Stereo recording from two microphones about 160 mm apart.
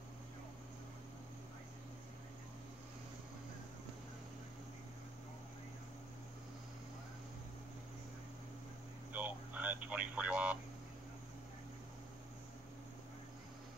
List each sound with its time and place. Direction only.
9.1 s radio: 10° right (ahead or behind)